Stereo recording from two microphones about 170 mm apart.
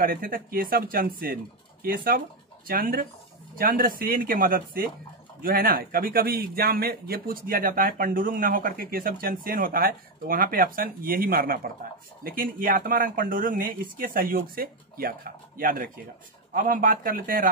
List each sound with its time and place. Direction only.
0.0 s speech: 55° right (ahead or behind)